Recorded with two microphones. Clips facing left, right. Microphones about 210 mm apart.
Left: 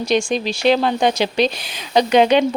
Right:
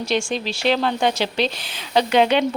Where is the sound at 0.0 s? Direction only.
15° left (ahead or behind).